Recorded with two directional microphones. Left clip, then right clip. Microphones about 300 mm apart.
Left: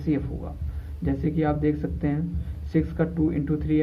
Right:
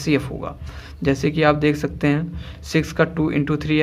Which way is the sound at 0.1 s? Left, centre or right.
Right.